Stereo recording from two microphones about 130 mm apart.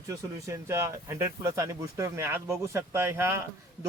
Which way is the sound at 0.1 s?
25° right (ahead or behind).